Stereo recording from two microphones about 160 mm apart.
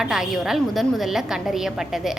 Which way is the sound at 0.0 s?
Centre (ahead or behind).